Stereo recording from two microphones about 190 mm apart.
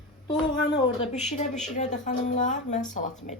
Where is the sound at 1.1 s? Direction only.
35° left (ahead or behind).